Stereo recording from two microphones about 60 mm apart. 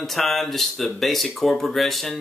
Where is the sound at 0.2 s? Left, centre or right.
Centre.